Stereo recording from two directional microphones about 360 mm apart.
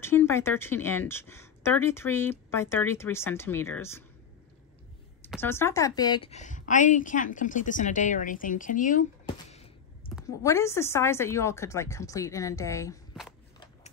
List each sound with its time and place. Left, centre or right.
0.0 s speech: centre
5.2 s a woman's voice: centre